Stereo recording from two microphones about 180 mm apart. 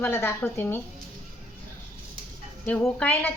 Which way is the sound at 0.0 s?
15° left (ahead or behind).